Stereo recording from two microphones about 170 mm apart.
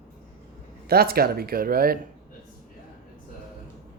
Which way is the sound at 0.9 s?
60° right (ahead or behind).